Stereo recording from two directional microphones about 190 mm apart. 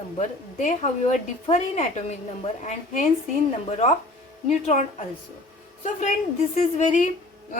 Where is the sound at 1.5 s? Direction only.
35° left (ahead or behind).